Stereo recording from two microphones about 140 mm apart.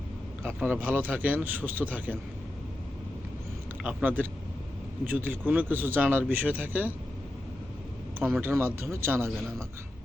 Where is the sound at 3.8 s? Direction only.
10° right (ahead or behind).